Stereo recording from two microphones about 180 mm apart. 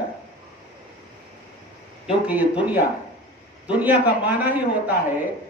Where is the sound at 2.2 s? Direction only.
5° right (ahead or behind).